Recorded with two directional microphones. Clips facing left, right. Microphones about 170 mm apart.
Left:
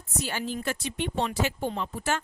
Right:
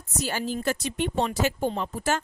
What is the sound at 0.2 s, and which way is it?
A woman's voice, 40° right (ahead or behind).